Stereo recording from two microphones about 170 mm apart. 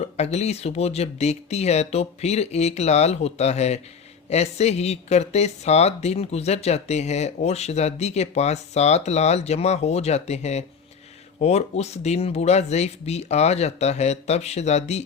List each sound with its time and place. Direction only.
0.2 s a woman's voice: 40° left (ahead or behind)